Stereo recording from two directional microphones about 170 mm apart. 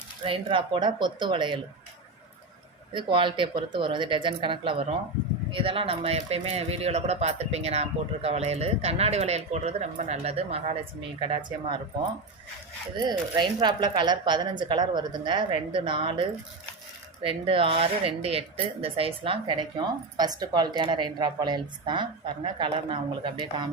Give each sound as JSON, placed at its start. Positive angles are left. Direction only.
{"t": 0.3, "sound": "speech", "side_deg": -30}
{"t": 2.9, "sound": "speech", "side_deg": -30}
{"t": 13.0, "sound": "speech", "side_deg": -25}